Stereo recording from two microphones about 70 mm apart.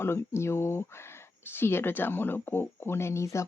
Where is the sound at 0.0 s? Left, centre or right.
Left.